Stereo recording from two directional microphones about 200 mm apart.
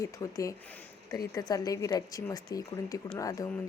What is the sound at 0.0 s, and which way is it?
A woman's voice, 15° left (ahead or behind).